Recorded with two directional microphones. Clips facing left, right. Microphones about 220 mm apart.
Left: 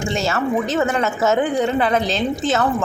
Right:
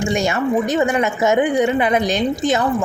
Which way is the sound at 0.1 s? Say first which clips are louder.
Right 1 dB; 15° right (ahead or behind).